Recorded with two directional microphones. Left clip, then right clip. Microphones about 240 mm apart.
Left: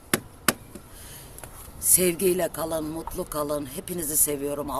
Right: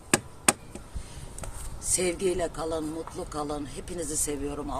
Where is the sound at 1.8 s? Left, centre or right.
Left.